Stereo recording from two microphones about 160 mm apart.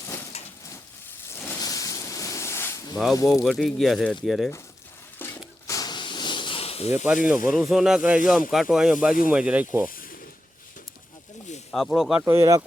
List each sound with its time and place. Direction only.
0.3 s a sound: 40° left (ahead or behind)
1.3 s a sound: 15° left (ahead or behind)
3.3 s speech: centre (ahead or behind)
5.2 s a sound: 15° left (ahead or behind); by 6.9 s 40° left (ahead or behind)
6.9 s speech: 10° right (ahead or behind)
7.5 s speech: centre (ahead or behind)
9.9 s mechanisms: 65° left (ahead or behind)
11.7 s speech: centre (ahead or behind)
12.2 s speech: 20° right (ahead or behind)